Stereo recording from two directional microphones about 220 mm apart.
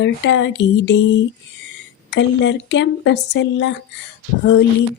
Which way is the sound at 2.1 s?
55° left (ahead or behind).